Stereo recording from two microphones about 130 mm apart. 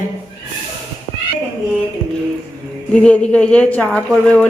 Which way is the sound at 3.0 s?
10° left (ahead or behind).